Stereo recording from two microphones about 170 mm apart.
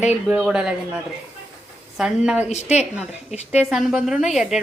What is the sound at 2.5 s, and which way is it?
Speech, 40° left (ahead or behind).